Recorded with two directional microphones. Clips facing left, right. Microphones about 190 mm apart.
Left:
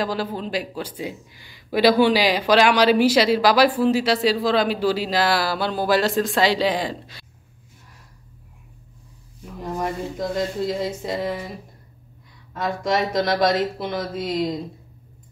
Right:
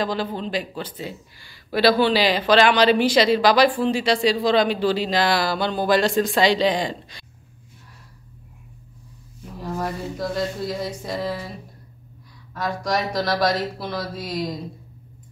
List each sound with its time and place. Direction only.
0.0 s speech: 5° left (ahead or behind)
9.6 s speech: 20° left (ahead or behind)
12.5 s speech: 25° left (ahead or behind)